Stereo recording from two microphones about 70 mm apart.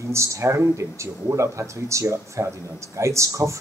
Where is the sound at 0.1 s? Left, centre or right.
Right.